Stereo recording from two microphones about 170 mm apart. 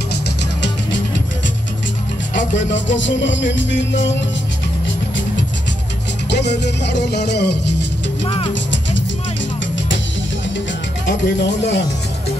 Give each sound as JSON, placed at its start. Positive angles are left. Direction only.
{"t": 2.3, "sound": "music", "side_deg": 90}
{"t": 6.3, "sound": "music", "side_deg": 85}
{"t": 11.1, "sound": "music", "side_deg": 80}